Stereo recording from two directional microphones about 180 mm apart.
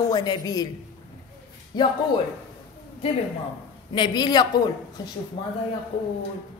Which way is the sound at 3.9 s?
25° left (ahead or behind).